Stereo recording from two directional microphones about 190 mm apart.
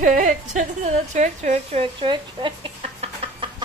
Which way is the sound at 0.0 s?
45° right (ahead or behind).